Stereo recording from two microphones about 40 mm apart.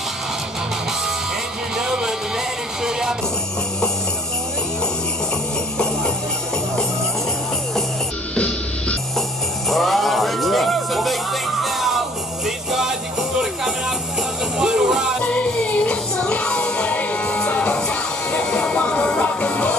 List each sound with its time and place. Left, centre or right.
1.8 s music: centre
8.4 s music: left
9.7 s music: centre
15.2 s music: left
15.7 s a sound: left
16.3 s music: left